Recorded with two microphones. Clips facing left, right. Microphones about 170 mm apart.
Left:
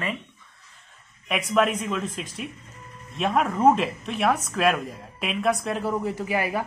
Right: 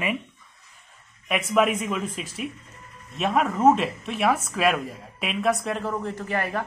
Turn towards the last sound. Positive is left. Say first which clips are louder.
# left 2 dB
turn(degrees=10)  # may be behind; listen again after turning